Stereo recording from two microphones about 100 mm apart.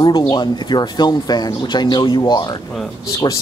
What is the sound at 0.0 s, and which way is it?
Speech, 50° left (ahead or behind).